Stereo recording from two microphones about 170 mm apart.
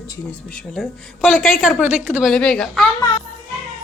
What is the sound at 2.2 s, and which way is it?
Speech, 5° left (ahead or behind).